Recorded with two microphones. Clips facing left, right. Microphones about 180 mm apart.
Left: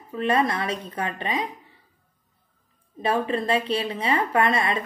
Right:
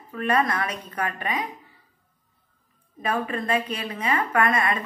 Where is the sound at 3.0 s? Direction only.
30° left (ahead or behind).